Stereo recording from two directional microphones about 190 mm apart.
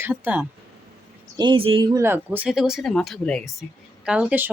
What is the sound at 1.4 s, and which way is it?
Speech, 25° right (ahead or behind).